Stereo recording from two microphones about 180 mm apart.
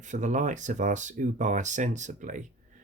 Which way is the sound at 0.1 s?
45° right (ahead or behind).